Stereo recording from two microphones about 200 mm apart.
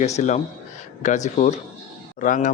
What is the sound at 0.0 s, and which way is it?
Speech, 35° left (ahead or behind).